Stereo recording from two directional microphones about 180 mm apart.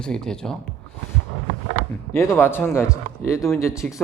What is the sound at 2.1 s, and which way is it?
Speech, 15° left (ahead or behind).